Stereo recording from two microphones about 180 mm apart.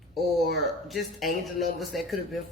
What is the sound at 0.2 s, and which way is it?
Speech, centre (ahead or behind).